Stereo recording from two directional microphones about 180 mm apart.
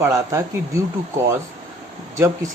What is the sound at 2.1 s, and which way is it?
Speech, 15° right (ahead or behind).